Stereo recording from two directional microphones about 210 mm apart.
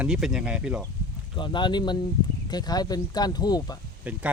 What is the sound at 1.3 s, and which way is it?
Speech, 20° left (ahead or behind).